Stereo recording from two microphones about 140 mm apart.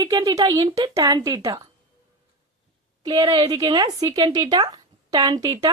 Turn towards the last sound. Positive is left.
turn(degrees=-30)  # may be behind; listen again after turning